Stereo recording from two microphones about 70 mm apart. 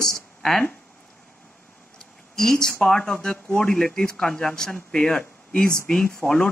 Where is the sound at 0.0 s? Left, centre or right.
Centre.